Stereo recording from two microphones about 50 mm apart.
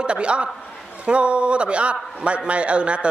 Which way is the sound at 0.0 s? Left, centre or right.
Right.